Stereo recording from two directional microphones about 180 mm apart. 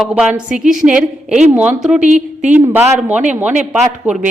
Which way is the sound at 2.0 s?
40° right (ahead or behind).